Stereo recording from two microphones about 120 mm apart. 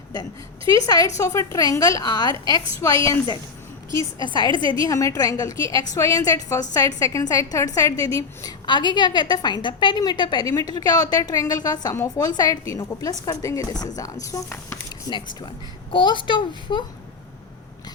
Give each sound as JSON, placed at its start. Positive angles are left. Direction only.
{"t": 0.9, "sound": "a woman's voice", "side_deg": 30}
{"t": 5.5, "sound": "a woman's voice", "side_deg": -45}
{"t": 5.9, "sound": "a woman's voice", "side_deg": 30}
{"t": 15.9, "sound": "a woman's voice", "side_deg": 40}